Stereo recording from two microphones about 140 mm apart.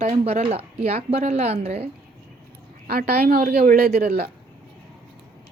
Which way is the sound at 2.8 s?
90° right.